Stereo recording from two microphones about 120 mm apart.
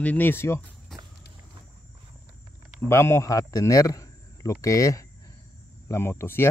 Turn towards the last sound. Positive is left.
turn(degrees=20)  # may be behind; listen again after turning